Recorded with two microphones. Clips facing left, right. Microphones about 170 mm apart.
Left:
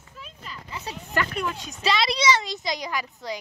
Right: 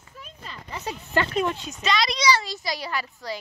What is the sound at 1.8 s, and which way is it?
A child's voice, 30° left (ahead or behind).